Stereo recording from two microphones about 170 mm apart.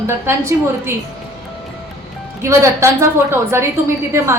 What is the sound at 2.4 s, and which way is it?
Speech, 15° right (ahead or behind).